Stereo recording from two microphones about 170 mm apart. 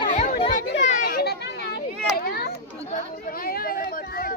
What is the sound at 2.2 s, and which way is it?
Children playing, 65° left (ahead or behind).